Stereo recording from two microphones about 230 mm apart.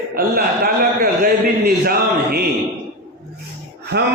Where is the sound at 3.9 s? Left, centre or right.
Right.